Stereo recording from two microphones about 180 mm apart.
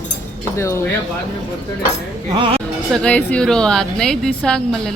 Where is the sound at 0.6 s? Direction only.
15° left (ahead or behind).